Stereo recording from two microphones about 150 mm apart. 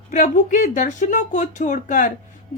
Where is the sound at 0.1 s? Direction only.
60° left (ahead or behind).